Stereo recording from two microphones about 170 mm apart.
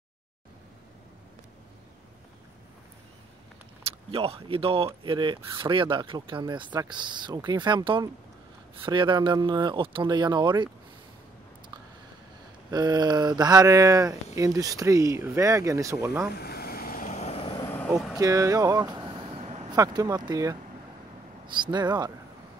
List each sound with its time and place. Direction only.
3.8 s speech: 35° right (ahead or behind)
12.7 s speech: 25° right (ahead or behind)
16.3 s vehicle: 65° left (ahead or behind); by 17.6 s 30° left (ahead or behind)
17.6 s vehicle: 10° left (ahead or behind)
18.1 s vehicle: 20° right (ahead or behind); by 19.7 s 40° right (ahead or behind)
19.7 s speech: 20° right (ahead or behind)